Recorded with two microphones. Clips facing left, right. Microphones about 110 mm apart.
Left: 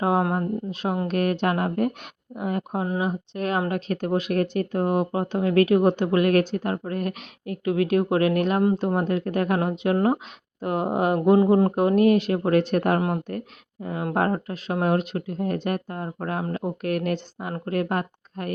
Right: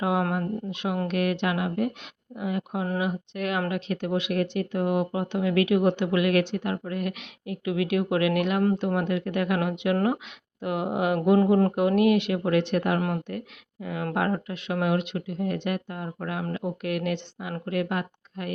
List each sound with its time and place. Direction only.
0.0 s speech: 35° left (ahead or behind)
3.0 s a woman's voice: 35° left (ahead or behind)